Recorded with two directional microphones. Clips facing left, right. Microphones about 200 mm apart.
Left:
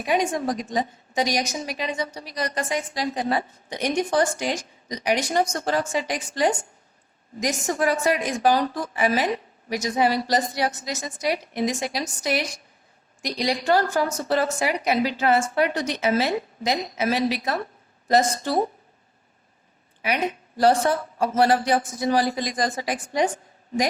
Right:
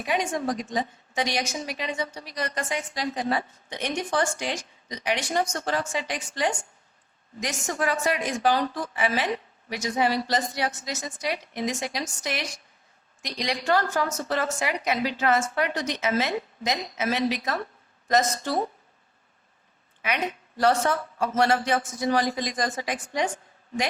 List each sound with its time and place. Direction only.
0.0 s a woman's voice: 40° left (ahead or behind)
20.6 s a woman's voice: 35° left (ahead or behind)